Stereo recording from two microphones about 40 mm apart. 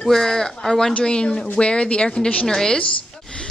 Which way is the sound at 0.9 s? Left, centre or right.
Left.